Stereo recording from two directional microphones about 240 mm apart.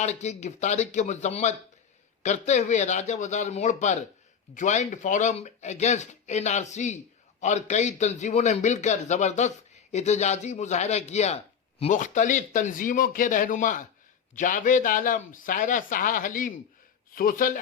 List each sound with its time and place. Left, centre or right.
0.0 s speech: left